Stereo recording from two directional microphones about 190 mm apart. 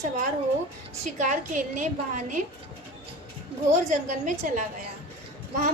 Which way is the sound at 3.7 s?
40° right (ahead or behind).